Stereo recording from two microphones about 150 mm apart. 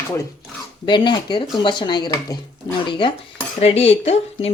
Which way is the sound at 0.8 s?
30° left (ahead or behind).